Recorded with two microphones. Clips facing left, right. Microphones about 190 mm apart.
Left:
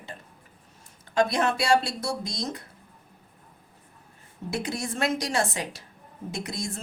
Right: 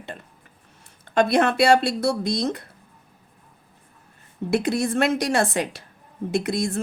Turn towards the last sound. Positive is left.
turn(degrees=-60)  # may be behind; listen again after turning